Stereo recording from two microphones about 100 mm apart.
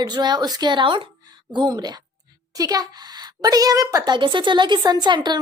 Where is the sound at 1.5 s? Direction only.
45° right (ahead or behind).